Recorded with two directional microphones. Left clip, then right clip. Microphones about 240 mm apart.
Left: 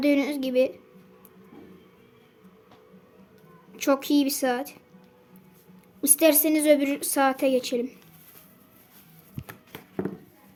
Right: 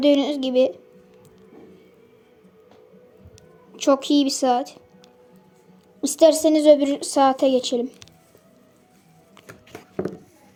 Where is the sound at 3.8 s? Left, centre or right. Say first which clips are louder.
Right 5 dB; centre.